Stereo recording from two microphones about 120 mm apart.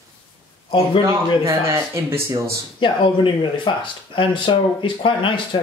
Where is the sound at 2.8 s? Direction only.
45° left (ahead or behind).